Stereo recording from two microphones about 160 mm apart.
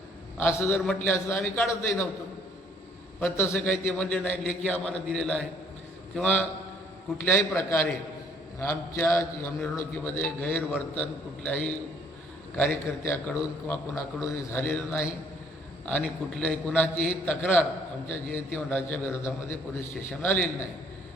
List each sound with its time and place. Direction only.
0.3 s a man's voice: 15° left (ahead or behind)
3.2 s a man's voice: 15° left (ahead or behind)